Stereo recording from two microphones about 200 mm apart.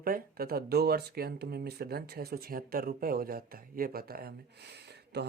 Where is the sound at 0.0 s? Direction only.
45° right (ahead or behind).